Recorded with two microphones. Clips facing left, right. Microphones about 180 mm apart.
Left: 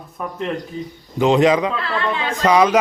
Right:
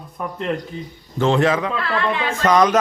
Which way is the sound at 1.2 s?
15° left (ahead or behind).